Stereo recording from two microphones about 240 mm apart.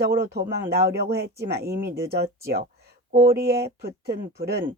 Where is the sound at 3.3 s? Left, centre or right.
Right.